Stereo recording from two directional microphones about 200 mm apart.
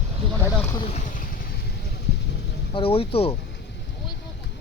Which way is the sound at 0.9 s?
45° left (ahead or behind).